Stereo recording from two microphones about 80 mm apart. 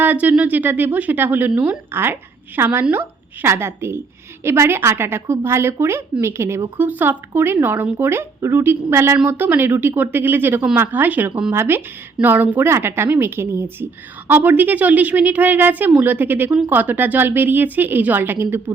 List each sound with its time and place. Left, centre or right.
0.0 s a woman's voice: right